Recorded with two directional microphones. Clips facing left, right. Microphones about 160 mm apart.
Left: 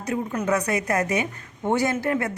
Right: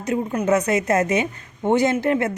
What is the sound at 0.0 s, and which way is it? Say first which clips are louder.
A woman's voice: right 4 dB; 20° right (ahead or behind).